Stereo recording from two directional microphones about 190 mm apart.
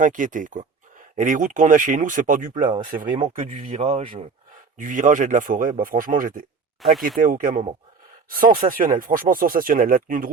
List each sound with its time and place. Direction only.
0.0 s speech: 45° right (ahead or behind)
4.8 s speech: 45° right (ahead or behind)
6.8 s speech: centre (ahead or behind)
7.2 s speech: 45° right (ahead or behind)